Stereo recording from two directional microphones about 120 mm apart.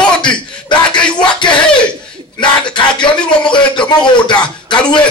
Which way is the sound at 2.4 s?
40° left (ahead or behind).